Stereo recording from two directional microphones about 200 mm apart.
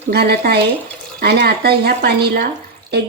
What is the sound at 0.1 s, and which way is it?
Speech, 50° right (ahead or behind).